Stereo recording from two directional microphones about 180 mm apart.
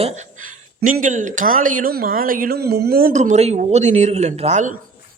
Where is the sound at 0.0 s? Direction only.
40° right (ahead or behind).